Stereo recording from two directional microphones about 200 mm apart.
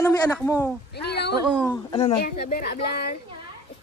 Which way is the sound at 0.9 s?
55° left (ahead or behind).